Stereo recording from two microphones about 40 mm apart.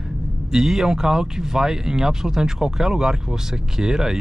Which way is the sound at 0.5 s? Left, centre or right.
Centre.